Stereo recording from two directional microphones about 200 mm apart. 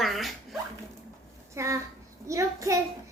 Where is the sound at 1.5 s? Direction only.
15° right (ahead or behind).